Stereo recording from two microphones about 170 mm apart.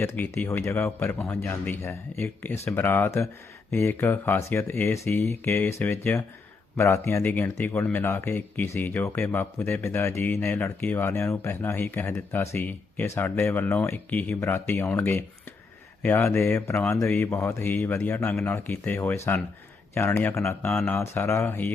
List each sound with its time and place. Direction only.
0.0 s speech: 10° left (ahead or behind)